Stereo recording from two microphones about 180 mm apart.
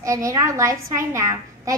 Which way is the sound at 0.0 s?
20° right (ahead or behind).